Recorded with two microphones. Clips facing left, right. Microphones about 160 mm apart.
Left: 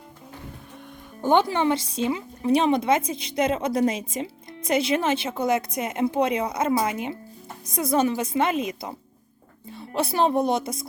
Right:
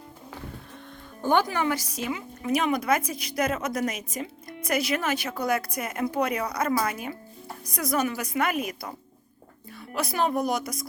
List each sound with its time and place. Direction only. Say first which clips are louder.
1.2 s speech: left 3 dB; 20° left (ahead or behind)